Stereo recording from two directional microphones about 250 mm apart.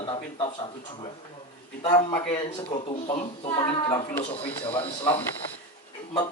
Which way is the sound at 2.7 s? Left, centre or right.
Left.